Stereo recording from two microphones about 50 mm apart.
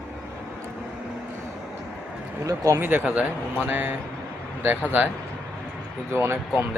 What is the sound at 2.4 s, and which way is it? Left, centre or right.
Speech, right.